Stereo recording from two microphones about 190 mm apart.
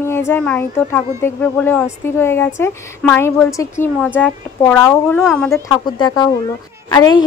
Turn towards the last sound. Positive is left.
turn(degrees=20)  # may be behind; listen again after turning